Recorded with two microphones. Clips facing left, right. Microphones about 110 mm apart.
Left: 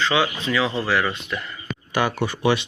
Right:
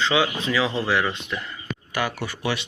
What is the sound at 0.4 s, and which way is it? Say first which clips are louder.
Speech: left 1 dB; 20° right (ahead or behind).